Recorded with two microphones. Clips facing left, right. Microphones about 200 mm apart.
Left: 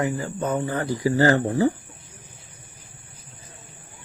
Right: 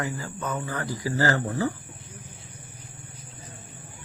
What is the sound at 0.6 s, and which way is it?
Speech, 25° left (ahead or behind).